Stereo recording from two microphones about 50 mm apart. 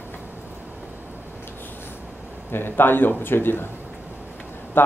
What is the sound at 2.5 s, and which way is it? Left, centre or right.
Speech, left.